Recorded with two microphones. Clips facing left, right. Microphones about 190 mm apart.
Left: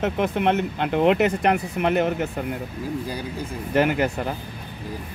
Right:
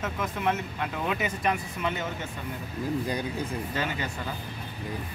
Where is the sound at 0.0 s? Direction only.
65° left (ahead or behind).